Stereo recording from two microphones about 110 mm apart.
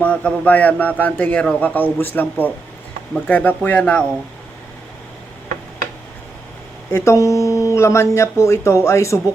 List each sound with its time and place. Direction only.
0.0 s a man's voice: 10° left (ahead or behind)
6.9 s speech: 25° left (ahead or behind)